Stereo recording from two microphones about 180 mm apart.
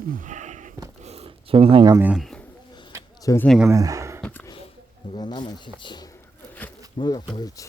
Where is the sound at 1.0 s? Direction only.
35° right (ahead or behind).